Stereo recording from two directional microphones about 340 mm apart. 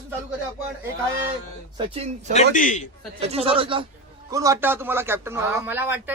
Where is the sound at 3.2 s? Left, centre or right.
Centre.